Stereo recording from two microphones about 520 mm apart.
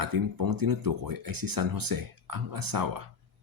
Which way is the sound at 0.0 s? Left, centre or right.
Right.